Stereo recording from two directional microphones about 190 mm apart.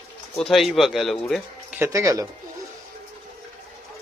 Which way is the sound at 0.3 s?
Centre (ahead or behind).